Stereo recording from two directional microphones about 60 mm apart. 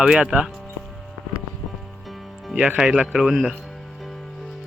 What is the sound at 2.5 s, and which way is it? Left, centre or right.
Speech, right.